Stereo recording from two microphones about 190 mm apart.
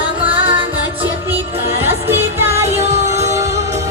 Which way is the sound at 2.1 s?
10° right (ahead or behind).